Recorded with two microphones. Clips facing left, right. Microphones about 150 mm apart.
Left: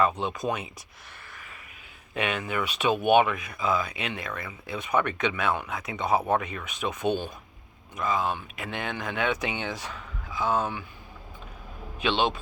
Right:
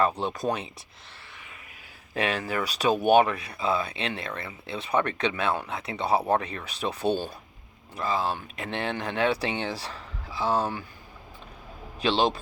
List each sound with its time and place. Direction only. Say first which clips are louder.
0.2 s speech: right 1 dB; 35° right (ahead or behind)
2.1 s speech: right 1 dB; 35° right (ahead or behind)
11.9 s speech: right 2 dB; 35° right (ahead or behind)